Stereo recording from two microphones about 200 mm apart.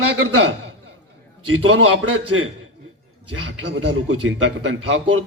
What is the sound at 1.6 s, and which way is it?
Speech, 90° right.